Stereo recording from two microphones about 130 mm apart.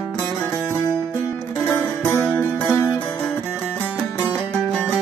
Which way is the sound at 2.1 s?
20° left (ahead or behind).